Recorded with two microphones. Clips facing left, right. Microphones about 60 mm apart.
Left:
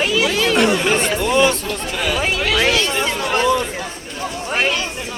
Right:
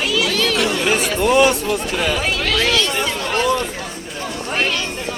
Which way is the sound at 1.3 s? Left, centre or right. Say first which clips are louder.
Right 2 dB; centre.